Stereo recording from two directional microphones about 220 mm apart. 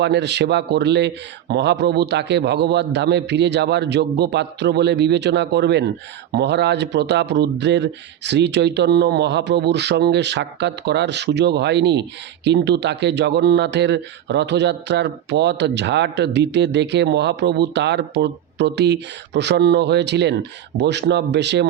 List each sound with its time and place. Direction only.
0.0 s speech: 50° right (ahead or behind)